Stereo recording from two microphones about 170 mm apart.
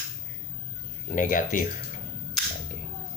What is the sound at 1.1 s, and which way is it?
Speech, 50° left (ahead or behind).